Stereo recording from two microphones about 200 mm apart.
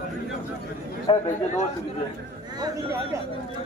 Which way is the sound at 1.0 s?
35° left (ahead or behind).